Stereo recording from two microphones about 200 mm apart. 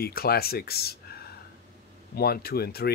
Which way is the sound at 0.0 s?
50° left (ahead or behind).